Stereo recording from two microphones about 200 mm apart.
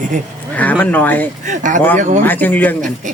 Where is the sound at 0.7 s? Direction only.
10° left (ahead or behind).